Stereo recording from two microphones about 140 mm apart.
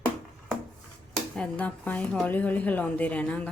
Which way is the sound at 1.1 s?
5° left (ahead or behind).